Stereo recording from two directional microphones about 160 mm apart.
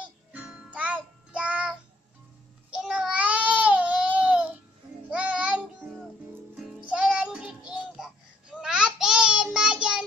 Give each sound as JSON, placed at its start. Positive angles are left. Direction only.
{"t": 0.0, "sound": "music", "side_deg": -5}
{"t": 2.7, "sound": "baby cry", "side_deg": -5}
{"t": 5.1, "sound": "music", "side_deg": -10}
{"t": 8.5, "sound": "child singing", "side_deg": -5}